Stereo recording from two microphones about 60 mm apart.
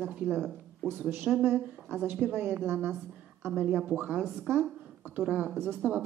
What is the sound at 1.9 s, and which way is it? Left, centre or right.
A woman's voice, right.